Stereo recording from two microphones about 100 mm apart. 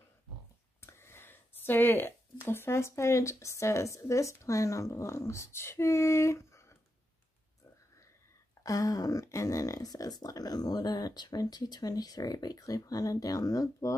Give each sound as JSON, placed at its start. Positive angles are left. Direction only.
{"t": 0.7, "sound": "speech", "side_deg": 25}
{"t": 8.6, "sound": "speech", "side_deg": 35}